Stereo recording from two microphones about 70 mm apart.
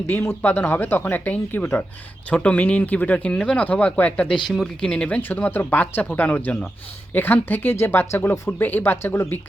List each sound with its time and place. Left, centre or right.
0.1 s speech: left
2.3 s speech: centre
4.4 s speech: centre
4.8 s speech: centre; by 9.4 s left